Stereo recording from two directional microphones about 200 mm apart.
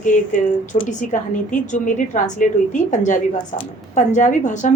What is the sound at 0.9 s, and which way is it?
A woman's voice, 40° left (ahead or behind).